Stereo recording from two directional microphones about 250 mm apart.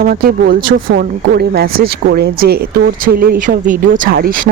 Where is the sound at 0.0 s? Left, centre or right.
Right.